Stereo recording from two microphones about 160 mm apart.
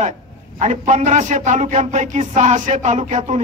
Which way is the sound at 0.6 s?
45° right (ahead or behind).